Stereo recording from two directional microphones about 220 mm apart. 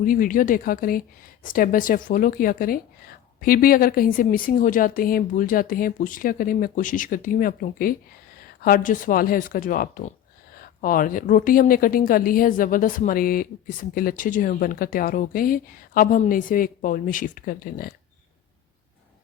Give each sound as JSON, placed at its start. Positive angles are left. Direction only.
{"t": 0.0, "sound": "speech", "side_deg": 40}